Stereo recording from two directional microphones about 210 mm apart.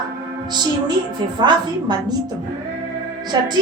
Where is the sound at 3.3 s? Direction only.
20° right (ahead or behind).